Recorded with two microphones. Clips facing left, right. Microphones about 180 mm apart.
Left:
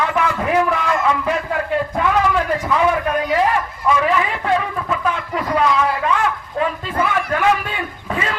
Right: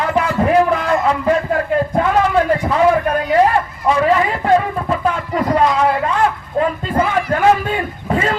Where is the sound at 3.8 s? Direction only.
35° right (ahead or behind).